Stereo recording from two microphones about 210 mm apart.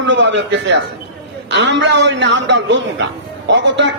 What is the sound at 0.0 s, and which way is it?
A man's voice, 60° right (ahead or behind).